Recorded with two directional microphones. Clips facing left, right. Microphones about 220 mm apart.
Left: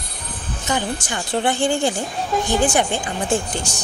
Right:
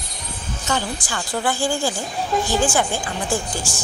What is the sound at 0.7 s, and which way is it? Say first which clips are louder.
A woman's voice: left 2 dB; 15° left (ahead or behind).